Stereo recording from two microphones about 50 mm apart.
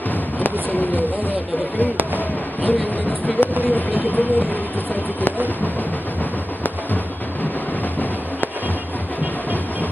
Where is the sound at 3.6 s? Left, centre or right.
Left.